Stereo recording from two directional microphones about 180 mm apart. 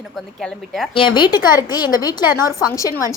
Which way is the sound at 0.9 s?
25° left (ahead or behind).